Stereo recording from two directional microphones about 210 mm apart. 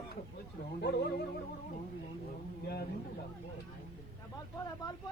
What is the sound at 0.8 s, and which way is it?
Speech, 50° left (ahead or behind).